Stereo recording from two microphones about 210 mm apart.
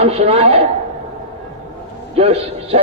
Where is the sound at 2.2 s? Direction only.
30° right (ahead or behind).